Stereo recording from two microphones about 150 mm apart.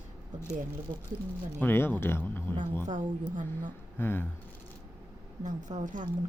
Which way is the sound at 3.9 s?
15° left (ahead or behind).